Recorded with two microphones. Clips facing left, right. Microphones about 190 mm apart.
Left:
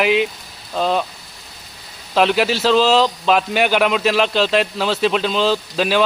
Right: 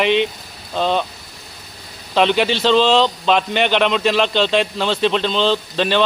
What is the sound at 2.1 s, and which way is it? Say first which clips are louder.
Speech: even; centre (ahead or behind).